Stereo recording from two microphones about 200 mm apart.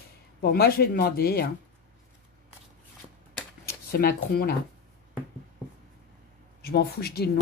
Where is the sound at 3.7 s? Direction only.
50° left (ahead or behind).